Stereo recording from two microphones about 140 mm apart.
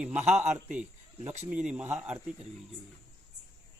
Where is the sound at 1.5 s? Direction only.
10° right (ahead or behind).